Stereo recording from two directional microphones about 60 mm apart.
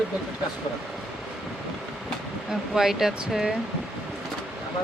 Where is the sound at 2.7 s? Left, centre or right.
Centre.